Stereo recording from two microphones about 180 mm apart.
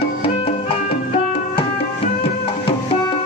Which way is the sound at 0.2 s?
35° left (ahead or behind).